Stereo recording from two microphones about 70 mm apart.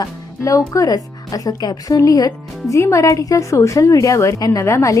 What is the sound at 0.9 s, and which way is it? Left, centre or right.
Speech, left.